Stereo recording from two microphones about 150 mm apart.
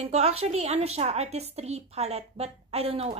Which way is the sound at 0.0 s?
45° right (ahead or behind).